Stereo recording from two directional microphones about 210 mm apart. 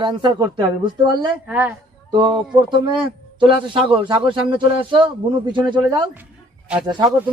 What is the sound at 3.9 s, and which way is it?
Speech, 20° right (ahead or behind).